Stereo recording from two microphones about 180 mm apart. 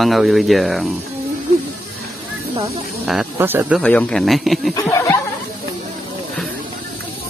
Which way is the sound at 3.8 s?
5° left (ahead or behind).